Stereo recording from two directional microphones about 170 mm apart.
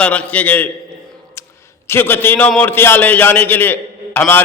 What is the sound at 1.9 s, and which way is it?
A man's voice, 15° left (ahead or behind).